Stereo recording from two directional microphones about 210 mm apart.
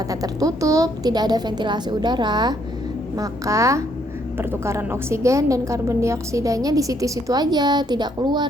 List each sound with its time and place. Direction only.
0.1 s a woman's voice: 15° right (ahead or behind)